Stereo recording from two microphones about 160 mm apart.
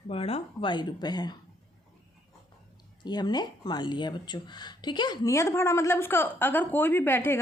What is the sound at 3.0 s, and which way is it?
Speech, 25° left (ahead or behind).